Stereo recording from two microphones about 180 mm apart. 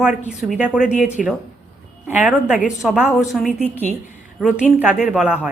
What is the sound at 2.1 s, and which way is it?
A woman's voice, 5° right (ahead or behind).